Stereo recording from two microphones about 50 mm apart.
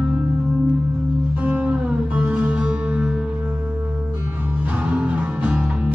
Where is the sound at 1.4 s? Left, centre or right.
Right.